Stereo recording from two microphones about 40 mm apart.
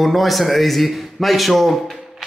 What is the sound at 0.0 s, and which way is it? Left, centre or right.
A man's voice, centre.